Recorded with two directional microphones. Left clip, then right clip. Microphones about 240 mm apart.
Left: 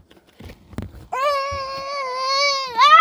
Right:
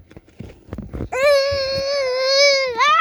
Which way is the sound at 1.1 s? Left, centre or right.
Centre.